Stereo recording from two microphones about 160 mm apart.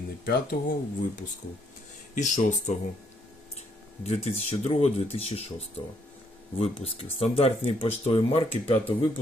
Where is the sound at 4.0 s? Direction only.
40° left (ahead or behind).